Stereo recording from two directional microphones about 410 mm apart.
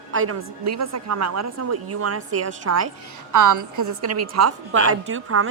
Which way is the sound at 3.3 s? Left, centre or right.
Right.